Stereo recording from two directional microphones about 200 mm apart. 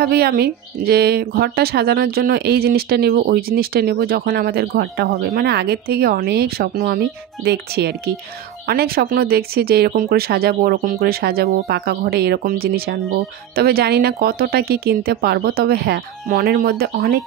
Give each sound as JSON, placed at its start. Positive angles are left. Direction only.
{"t": 0.0, "sound": "speech", "side_deg": -50}